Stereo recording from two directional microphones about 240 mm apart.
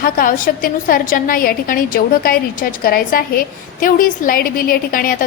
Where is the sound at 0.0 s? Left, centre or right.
Left.